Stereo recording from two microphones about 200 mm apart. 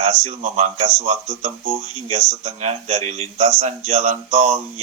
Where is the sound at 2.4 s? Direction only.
35° right (ahead or behind).